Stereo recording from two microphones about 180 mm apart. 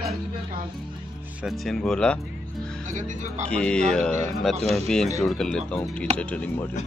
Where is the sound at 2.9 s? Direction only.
45° right (ahead or behind).